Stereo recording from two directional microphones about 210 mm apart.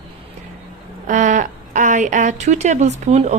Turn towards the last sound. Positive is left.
turn(degrees=-30)  # may be behind; listen again after turning